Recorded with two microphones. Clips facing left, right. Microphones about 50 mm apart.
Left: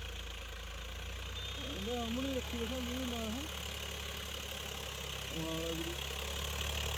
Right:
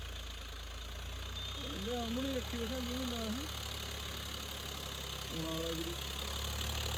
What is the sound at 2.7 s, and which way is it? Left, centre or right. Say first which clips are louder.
Speech: even; left.